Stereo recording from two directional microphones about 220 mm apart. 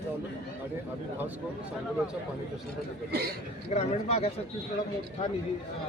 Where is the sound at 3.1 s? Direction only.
45° right (ahead or behind).